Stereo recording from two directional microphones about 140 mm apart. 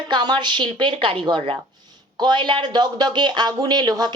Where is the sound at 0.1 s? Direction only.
35° right (ahead or behind).